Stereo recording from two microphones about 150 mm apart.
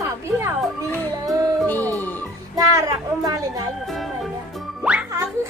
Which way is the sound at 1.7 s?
10° left (ahead or behind).